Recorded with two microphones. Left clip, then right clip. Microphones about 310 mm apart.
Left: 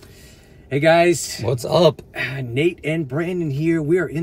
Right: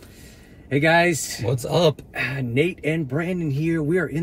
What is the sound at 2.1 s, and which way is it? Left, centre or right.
Speech, centre.